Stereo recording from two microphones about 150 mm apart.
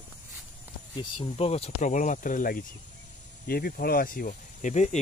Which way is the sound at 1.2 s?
45° left (ahead or behind).